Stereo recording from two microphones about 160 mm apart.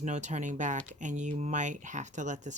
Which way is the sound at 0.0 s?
50° right (ahead or behind).